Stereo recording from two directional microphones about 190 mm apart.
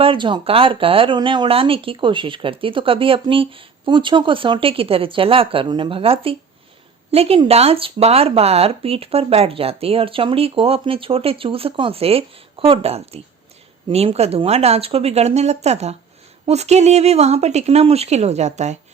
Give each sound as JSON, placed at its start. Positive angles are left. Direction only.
{"t": 0.0, "sound": "speech", "side_deg": -25}